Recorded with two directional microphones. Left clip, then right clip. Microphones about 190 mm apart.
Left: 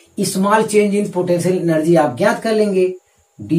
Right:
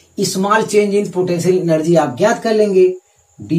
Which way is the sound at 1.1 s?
15° right (ahead or behind).